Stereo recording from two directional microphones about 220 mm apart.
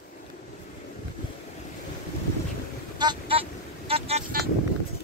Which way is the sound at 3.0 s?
20° right (ahead or behind).